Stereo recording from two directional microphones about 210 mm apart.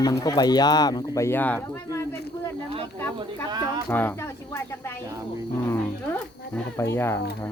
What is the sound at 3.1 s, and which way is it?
Speech, 15° right (ahead or behind).